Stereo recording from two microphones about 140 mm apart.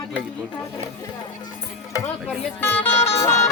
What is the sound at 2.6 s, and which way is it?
Music, 15° left (ahead or behind).